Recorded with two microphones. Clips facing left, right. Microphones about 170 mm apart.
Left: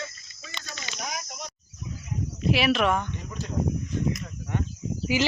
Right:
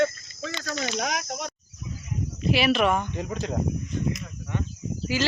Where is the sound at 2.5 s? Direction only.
Centre (ahead or behind).